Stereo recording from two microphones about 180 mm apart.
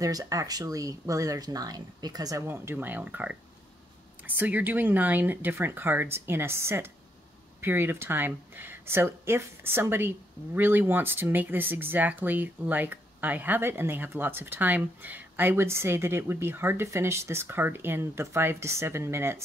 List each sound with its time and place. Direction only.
0.0 s speech: 20° right (ahead or behind)
4.4 s speech: 10° right (ahead or behind)